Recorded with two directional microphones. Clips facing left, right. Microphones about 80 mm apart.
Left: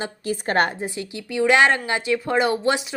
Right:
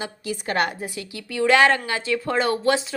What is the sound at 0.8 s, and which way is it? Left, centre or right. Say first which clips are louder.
A woman's voice: left 3 dB; left.